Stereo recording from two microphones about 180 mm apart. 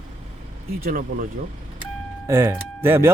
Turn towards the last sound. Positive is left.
turn(degrees=-15)  # may be behind; listen again after turning